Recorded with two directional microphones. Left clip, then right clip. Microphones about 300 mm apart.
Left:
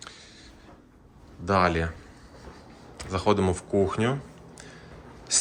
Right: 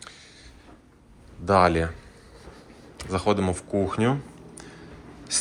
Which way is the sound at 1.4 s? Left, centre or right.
Centre.